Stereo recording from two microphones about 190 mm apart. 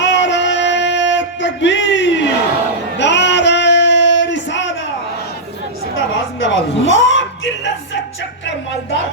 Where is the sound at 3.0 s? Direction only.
70° left (ahead or behind).